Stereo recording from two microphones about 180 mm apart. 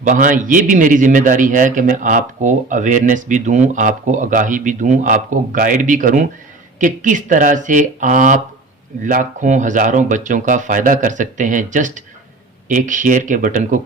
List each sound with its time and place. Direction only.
0.0 s a man's voice: 45° right (ahead or behind)